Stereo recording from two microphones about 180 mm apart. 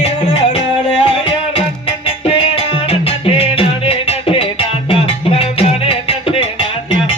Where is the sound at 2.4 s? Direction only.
30° left (ahead or behind).